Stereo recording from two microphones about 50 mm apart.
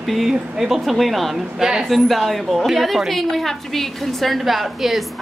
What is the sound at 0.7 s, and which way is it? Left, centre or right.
Speech, centre.